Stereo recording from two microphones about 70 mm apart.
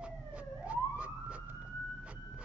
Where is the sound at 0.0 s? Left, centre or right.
Centre.